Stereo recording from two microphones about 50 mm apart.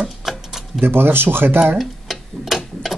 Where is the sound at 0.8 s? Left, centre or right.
Right.